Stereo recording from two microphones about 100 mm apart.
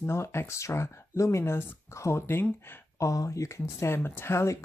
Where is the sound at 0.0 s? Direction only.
25° left (ahead or behind).